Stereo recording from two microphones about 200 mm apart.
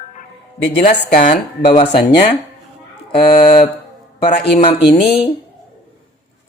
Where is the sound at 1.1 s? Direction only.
35° left (ahead or behind).